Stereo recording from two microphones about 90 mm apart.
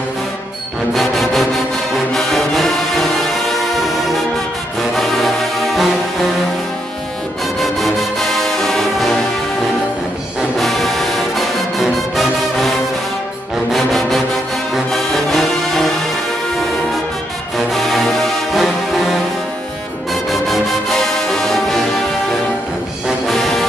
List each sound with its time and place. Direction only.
0.9 s music: centre (ahead or behind)
4.9 s brass instrument: centre (ahead or behind)
7.6 s music: centre (ahead or behind)
10.6 s music: centre (ahead or behind)
13.7 s music: centre (ahead or behind)
17.6 s music: centre (ahead or behind)
20.2 s music: centre (ahead or behind)
23.0 s music: centre (ahead or behind)